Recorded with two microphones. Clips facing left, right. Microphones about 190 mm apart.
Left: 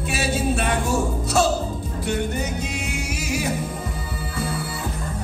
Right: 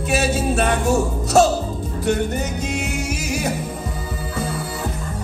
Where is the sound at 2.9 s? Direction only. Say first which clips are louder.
Right 2 dB; 45° right (ahead or behind).